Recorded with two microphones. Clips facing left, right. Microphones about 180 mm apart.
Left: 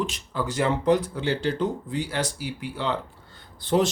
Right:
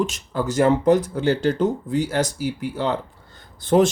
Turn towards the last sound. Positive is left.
turn(degrees=-50)  # may be behind; listen again after turning